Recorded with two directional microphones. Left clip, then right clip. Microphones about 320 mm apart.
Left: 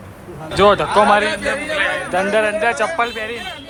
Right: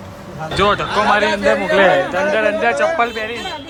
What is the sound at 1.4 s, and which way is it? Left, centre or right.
Speech, right.